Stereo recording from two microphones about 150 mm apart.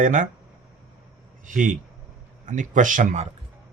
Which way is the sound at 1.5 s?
60° right (ahead or behind).